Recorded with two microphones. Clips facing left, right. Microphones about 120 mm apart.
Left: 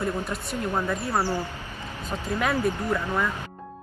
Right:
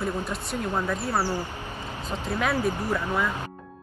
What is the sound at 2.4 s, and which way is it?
Speech, centre (ahead or behind).